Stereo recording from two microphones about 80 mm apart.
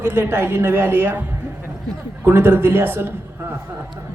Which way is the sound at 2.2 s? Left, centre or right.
Right.